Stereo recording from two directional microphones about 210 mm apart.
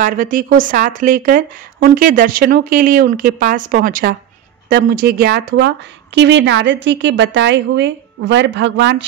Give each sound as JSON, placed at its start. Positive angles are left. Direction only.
{"t": 0.0, "sound": "a woman's voice", "side_deg": -40}